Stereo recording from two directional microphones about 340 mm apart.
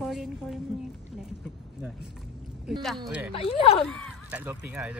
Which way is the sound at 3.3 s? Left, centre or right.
Centre.